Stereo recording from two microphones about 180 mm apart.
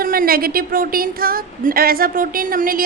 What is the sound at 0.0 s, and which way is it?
A woman's voice, 55° right (ahead or behind).